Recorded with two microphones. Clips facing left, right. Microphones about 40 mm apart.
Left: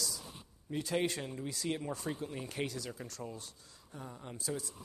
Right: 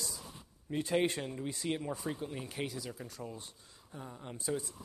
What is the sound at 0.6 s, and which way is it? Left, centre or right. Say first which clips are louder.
Speech: right 3 dB; centre.